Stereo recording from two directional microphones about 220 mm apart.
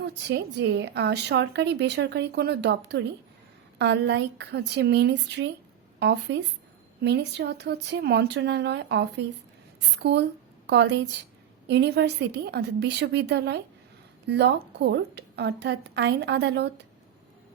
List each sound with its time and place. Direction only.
0.0 s a woman's voice: 50° right (ahead or behind)